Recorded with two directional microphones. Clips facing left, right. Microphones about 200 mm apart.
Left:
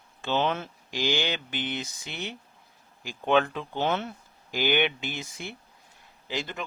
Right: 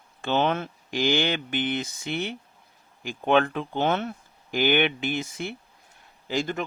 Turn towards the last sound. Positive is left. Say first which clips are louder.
# right 6 dB
turn(degrees=-45)  # may be behind; listen again after turning